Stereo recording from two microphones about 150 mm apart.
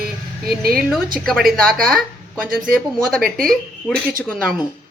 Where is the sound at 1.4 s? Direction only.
70° right (ahead or behind).